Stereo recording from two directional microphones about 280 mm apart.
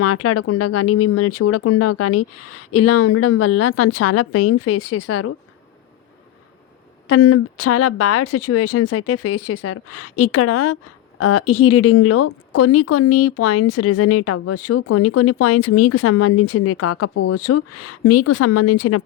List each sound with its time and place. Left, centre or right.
0.0 s speech: left
7.1 s a woman's voice: left